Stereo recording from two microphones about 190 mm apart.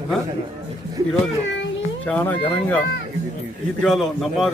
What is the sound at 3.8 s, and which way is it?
Speech, centre (ahead or behind).